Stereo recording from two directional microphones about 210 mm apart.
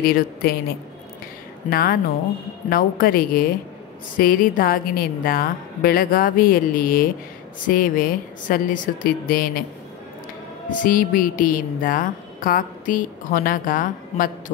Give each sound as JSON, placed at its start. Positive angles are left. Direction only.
{"t": 0.0, "sound": "a woman's voice", "side_deg": 45}
{"t": 1.7, "sound": "a woman's voice", "side_deg": 45}
{"t": 10.7, "sound": "speech", "side_deg": 40}